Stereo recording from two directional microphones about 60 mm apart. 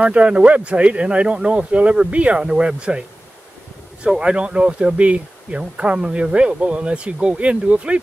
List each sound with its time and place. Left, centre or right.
0.0 s speech: centre
4.1 s speech: centre